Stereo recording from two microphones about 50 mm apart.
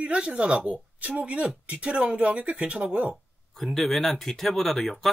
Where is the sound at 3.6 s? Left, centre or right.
Centre.